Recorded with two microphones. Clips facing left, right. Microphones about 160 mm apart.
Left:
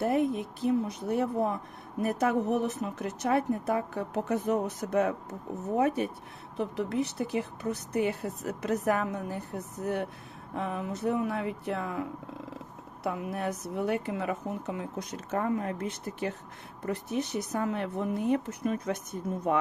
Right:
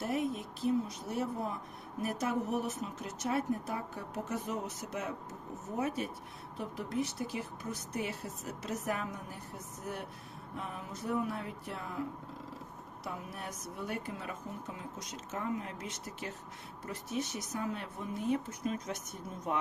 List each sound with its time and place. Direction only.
0.0 s speech: 60° left (ahead or behind)